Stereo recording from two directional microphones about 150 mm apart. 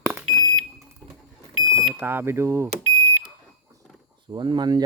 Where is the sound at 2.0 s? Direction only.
15° right (ahead or behind).